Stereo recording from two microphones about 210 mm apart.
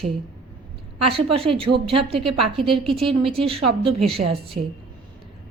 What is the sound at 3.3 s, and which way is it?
Speech, 25° right (ahead or behind).